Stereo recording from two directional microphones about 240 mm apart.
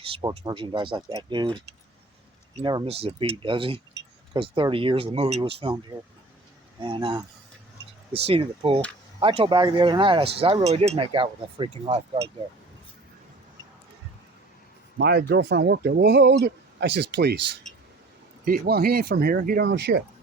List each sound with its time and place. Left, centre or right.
0.0 s speech: centre
6.7 s speech: centre
8.2 s speech: right
14.9 s speech: right
18.4 s speech: right